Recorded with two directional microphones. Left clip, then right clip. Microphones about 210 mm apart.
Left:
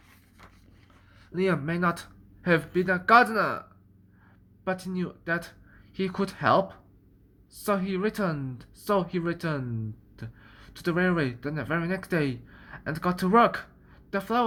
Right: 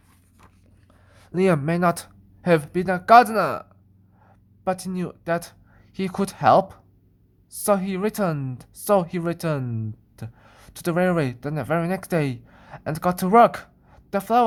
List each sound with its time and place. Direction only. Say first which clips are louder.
1.2 s speech: right 6 dB; 50° right (ahead or behind)